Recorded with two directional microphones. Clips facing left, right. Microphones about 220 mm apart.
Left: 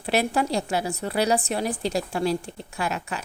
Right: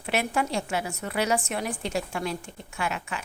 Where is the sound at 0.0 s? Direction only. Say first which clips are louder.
Left 4 dB; 35° left (ahead or behind).